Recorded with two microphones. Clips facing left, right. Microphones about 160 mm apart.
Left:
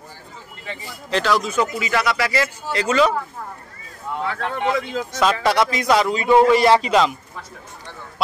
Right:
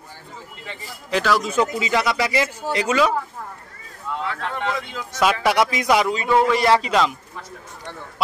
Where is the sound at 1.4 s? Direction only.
15° right (ahead or behind).